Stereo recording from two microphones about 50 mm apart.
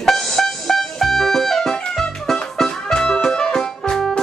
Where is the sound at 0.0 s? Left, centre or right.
Centre.